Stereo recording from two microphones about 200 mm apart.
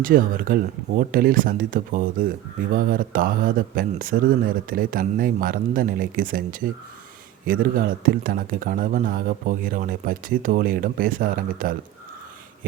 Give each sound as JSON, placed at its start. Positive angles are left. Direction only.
{"t": 0.0, "sound": "speech", "side_deg": -45}